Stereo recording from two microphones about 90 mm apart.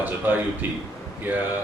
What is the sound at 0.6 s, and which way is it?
Speech, 20° right (ahead or behind).